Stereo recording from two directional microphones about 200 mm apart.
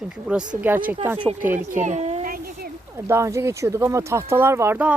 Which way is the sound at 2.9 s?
15° right (ahead or behind).